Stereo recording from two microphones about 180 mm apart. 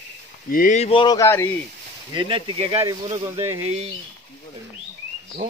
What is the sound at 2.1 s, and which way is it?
Speech, 25° right (ahead or behind).